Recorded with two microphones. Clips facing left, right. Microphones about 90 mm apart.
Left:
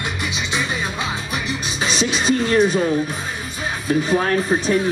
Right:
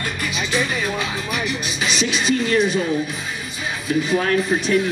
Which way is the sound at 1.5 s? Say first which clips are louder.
Even; 35° left (ahead or behind).